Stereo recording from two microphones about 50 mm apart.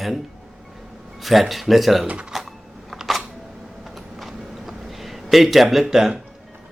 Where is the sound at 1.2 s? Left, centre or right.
Centre.